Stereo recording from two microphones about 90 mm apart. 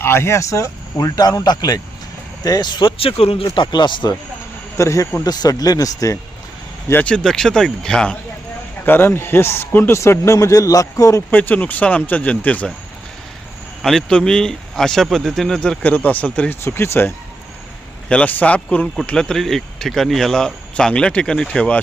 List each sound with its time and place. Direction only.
0.0 s speech: 25° left (ahead or behind); by 3.4 s 90° left
3.5 s speech: 60° left (ahead or behind)
4.8 s speech: 35° left (ahead or behind)
7.0 s speech: 10° left (ahead or behind)
8.8 s a man's voice: 25° left (ahead or behind); by 11.2 s 40° left (ahead or behind)
11.3 s speech: 20° left (ahead or behind)
13.8 s speech: 5° left (ahead or behind)
15.8 s speech: 20° left (ahead or behind)
16.6 s a man's voice: 30° left (ahead or behind)
18.1 s speech: 15° left (ahead or behind)